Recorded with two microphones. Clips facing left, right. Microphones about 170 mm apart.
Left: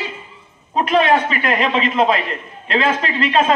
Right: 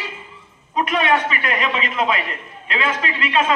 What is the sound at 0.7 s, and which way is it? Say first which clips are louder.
A man's voice: left 4 dB; 35° left (ahead or behind).